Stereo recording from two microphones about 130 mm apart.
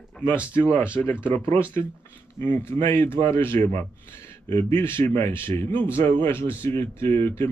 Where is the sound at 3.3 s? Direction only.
20° left (ahead or behind).